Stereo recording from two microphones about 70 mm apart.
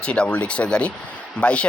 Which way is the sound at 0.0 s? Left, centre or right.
Centre.